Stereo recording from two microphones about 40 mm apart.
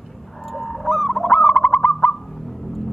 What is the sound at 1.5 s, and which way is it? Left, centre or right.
Bird, left.